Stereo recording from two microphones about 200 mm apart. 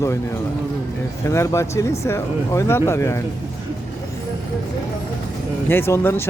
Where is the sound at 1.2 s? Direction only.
15° left (ahead or behind).